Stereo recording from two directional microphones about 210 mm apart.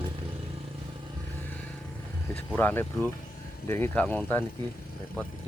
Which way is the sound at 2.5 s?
10° left (ahead or behind).